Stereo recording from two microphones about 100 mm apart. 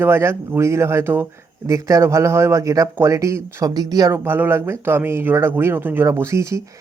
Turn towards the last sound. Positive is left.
turn(degrees=-30)  # may be behind; listen again after turning